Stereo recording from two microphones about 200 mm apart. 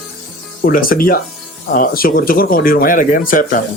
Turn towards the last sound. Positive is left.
turn(degrees=40)  # may be behind; listen again after turning